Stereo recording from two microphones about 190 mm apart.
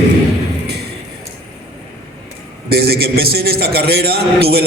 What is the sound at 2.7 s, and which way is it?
A man's voice, 55° right (ahead or behind).